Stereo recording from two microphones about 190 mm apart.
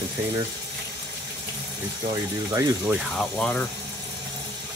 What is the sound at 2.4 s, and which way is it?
Speech, 15° right (ahead or behind).